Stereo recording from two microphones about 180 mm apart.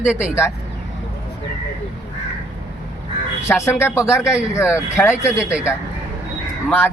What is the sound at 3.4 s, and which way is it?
A man's voice, 15° left (ahead or behind).